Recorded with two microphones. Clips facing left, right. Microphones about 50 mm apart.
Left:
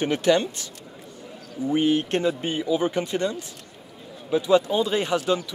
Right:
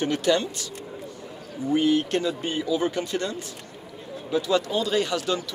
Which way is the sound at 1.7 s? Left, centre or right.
Left.